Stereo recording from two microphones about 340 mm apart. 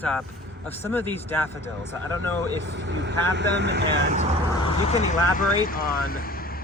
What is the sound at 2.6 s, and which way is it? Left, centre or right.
Speech, right.